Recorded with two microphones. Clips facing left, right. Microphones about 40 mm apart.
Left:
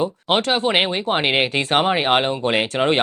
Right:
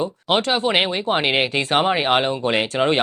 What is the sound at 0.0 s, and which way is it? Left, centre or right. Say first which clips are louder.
Speech: left 1 dB; centre.